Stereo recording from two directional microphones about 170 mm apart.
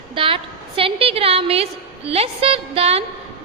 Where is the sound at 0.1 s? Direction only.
30° right (ahead or behind).